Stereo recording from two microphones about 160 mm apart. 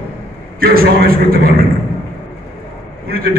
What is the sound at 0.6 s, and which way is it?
A man's voice, 70° right (ahead or behind).